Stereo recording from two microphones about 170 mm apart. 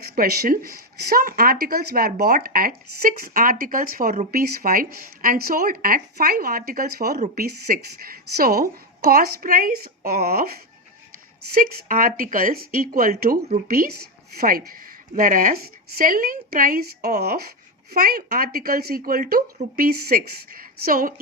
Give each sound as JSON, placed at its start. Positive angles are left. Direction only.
{"t": 0.0, "sound": "speech", "side_deg": -65}
{"t": 11.6, "sound": "speech", "side_deg": -55}